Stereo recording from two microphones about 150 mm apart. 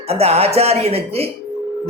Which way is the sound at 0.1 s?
45° right (ahead or behind).